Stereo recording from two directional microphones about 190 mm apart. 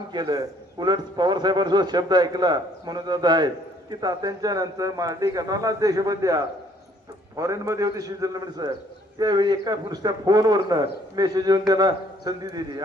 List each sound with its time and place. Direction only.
0.1 s a man's voice: 20° right (ahead or behind)